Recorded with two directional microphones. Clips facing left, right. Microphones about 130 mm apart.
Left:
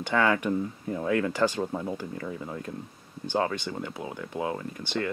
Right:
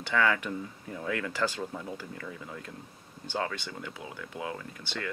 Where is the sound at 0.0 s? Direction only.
30° left (ahead or behind).